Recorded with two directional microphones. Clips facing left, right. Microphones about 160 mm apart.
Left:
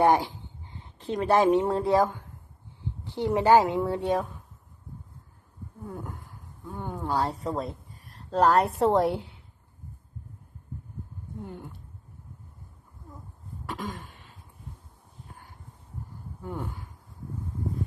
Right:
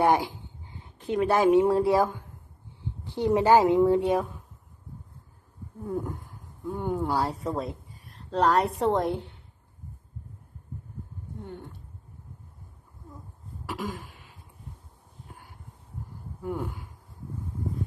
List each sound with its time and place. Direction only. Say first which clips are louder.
0.1 s a woman's voice: even; 15° right (ahead or behind)
1.0 s a woman's voice: even; 5° right (ahead or behind)
5.9 s a woman's voice: right 9 dB; 10° right (ahead or behind)
13.7 s a sound: right 2 dB; 5° right (ahead or behind)
16.4 s a woman's voice: right 4 dB; 10° right (ahead or behind)